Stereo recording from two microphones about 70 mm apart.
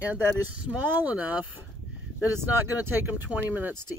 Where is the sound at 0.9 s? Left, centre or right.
Right.